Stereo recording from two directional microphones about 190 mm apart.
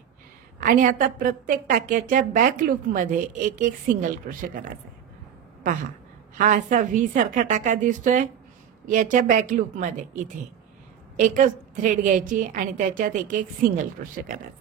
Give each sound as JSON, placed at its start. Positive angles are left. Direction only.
{"t": 0.6, "sound": "a woman's voice", "side_deg": -45}
{"t": 5.6, "sound": "a woman's voice", "side_deg": -45}
{"t": 11.1, "sound": "a woman's voice", "side_deg": -40}